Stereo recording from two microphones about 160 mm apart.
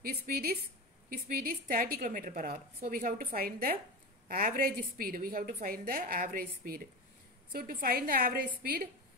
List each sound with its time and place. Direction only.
0.0 s a woman's voice: 70° right (ahead or behind)